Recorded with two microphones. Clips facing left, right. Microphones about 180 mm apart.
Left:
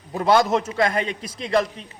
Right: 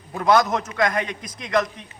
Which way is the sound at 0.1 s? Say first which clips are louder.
Left 1 dB; 25° left (ahead or behind).